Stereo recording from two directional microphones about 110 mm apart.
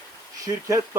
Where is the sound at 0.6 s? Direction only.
30° right (ahead or behind).